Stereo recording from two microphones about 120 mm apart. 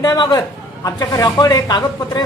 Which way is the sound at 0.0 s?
35° left (ahead or behind).